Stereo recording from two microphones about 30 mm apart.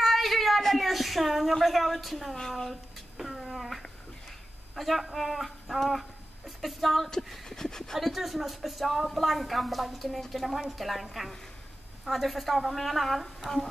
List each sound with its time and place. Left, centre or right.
0.0 s a sound: centre
0.6 s a woman's voice: centre
2.5 s a sound: centre
4.7 s a woman's voice: centre
7.4 s speech: centre
8.0 s a woman's voice: centre